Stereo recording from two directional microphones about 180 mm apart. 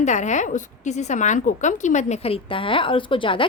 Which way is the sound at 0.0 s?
40° left (ahead or behind).